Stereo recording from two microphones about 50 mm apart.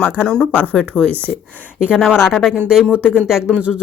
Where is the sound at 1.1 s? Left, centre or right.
Right.